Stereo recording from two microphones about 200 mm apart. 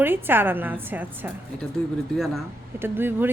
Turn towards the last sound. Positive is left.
turn(degrees=-10)  # may be behind; listen again after turning